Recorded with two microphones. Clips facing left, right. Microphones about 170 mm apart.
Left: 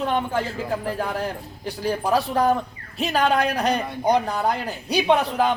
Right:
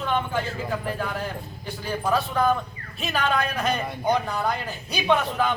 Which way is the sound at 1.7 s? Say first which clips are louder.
Left 3 dB; 35° left (ahead or behind).